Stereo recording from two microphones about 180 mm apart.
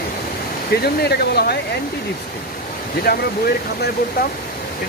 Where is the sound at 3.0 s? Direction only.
55° left (ahead or behind).